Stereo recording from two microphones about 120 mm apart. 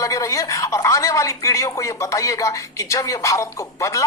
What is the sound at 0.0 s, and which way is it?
Speech, 25° left (ahead or behind).